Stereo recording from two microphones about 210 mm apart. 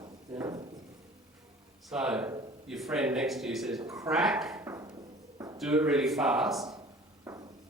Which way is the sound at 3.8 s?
15° right (ahead or behind).